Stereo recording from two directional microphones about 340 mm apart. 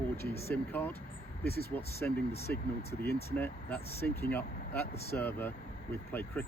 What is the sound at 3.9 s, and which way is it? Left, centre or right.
Speech, left.